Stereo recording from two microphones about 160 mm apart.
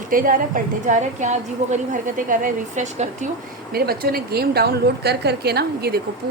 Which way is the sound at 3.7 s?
70° right (ahead or behind).